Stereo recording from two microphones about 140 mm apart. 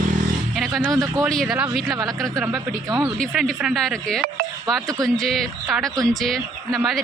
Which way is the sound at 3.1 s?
5° left (ahead or behind).